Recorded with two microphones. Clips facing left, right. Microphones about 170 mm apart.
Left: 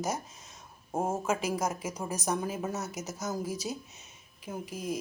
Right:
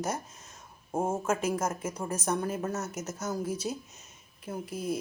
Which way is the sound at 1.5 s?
10° left (ahead or behind).